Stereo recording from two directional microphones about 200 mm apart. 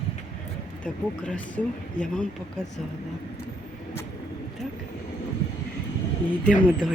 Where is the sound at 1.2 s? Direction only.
5° left (ahead or behind).